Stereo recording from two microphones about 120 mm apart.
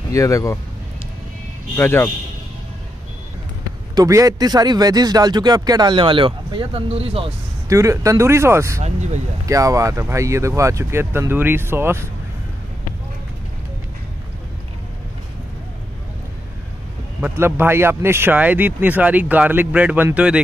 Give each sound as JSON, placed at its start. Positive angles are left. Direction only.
{"t": 0.1, "sound": "speech", "side_deg": 25}
{"t": 1.8, "sound": "speech", "side_deg": 20}
{"t": 3.9, "sound": "speech", "side_deg": -30}
{"t": 7.6, "sound": "speech", "side_deg": -25}
{"t": 8.8, "sound": "speech", "side_deg": -75}
{"t": 9.5, "sound": "speech", "side_deg": -25}
{"t": 17.2, "sound": "speech", "side_deg": -15}